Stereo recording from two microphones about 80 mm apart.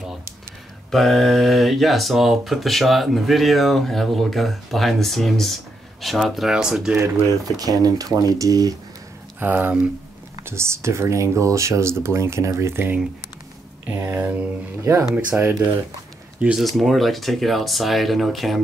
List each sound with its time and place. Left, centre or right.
0.9 s speech: centre
7.0 s speech: right
9.4 s speech: right
10.4 s speech: right; by 16.6 s centre
16.7 s speech: centre